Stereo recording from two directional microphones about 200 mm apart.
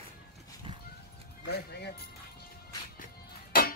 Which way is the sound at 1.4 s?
55° left (ahead or behind).